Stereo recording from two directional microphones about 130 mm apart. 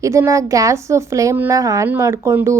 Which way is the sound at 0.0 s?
25° right (ahead or behind).